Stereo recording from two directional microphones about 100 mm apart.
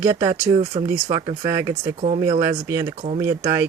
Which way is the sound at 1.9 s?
90° right.